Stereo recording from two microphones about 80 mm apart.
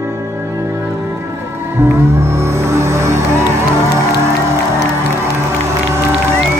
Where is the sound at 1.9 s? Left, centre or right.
Right.